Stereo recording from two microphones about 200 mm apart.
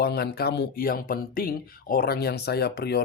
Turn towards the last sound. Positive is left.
turn(degrees=55)  # may be behind; listen again after turning